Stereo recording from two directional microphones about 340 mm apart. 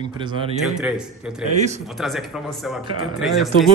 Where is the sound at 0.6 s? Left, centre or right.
Centre.